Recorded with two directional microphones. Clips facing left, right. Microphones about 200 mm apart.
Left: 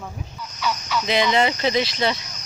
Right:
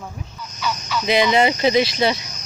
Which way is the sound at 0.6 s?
Centre (ahead or behind).